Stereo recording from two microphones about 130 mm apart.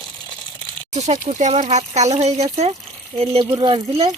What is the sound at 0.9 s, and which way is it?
Speech, 60° right (ahead or behind).